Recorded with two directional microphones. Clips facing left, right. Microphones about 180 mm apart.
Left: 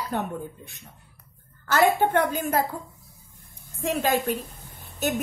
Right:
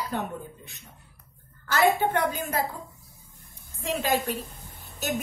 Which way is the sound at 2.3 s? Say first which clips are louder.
Left 5 dB; 50° left (ahead or behind).